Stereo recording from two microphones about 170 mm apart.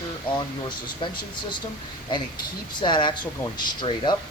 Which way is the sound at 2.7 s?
25° left (ahead or behind).